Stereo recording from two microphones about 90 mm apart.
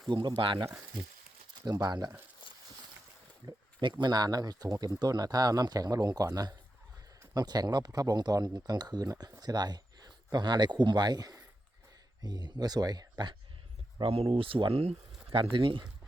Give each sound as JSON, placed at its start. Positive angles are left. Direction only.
{"t": 0.1, "sound": "speech", "side_deg": -65}
{"t": 1.6, "sound": "speech", "side_deg": -45}
{"t": 3.4, "sound": "speech", "side_deg": -55}
{"t": 14.0, "sound": "speech", "side_deg": -90}